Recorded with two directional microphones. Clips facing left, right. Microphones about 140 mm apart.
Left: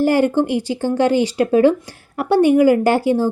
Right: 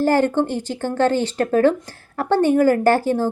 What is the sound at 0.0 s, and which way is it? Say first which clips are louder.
Speech: left 2 dB; 10° left (ahead or behind).